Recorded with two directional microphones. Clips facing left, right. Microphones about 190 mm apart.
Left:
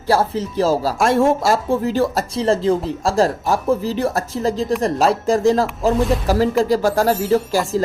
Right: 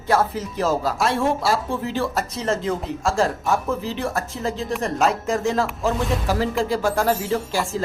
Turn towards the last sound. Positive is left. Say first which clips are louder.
# left 6 dB
turn(degrees=40)  # may be behind; listen again after turning